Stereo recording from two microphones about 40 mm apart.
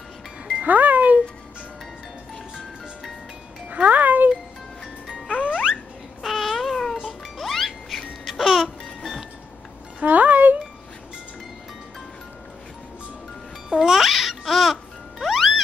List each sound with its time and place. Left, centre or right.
0.7 s speech: right
3.7 s music: right
5.4 s music: centre
6.2 s babbling: centre
7.1 s music: centre
10.0 s music: right
13.7 s music: centre